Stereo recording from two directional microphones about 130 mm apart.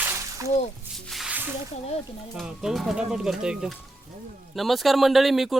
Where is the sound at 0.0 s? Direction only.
20° right (ahead or behind).